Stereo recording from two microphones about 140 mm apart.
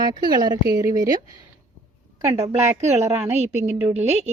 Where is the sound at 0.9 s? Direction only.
75° right (ahead or behind).